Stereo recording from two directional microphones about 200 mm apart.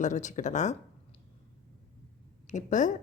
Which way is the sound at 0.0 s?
35° left (ahead or behind).